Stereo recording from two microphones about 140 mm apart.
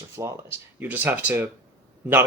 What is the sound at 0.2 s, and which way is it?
Speech, 20° right (ahead or behind).